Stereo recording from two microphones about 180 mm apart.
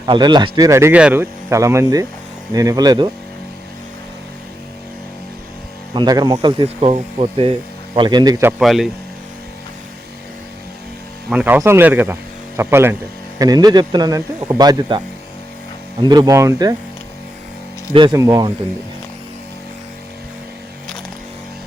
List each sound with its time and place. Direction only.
0.0 s speech: 25° right (ahead or behind)
5.9 s speech: 25° right (ahead or behind)
8.6 s speech: centre (ahead or behind)
11.3 s speech: 10° right (ahead or behind)
17.9 s speech: 25° right (ahead or behind)